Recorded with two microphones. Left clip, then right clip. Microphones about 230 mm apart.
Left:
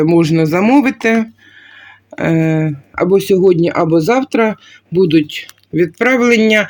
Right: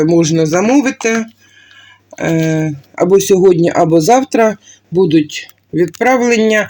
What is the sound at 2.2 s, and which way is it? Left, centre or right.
Speech, left.